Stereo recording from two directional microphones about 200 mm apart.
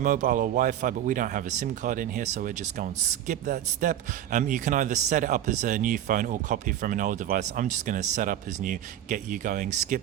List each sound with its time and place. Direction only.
0.0 s speech: 40° right (ahead or behind)